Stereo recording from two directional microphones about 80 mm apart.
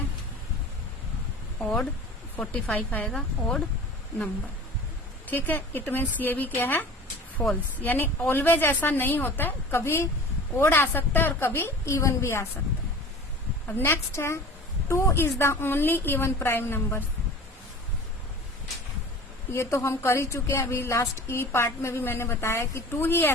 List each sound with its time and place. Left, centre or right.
1.6 s speech: centre
2.3 s a woman's voice: centre
3.1 s a woman's voice: centre
5.2 s a woman's voice: left
13.7 s a woman's voice: left
19.5 s a woman's voice: left